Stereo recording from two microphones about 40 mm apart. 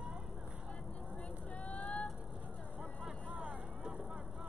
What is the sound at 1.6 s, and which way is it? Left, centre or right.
Vehicle, left.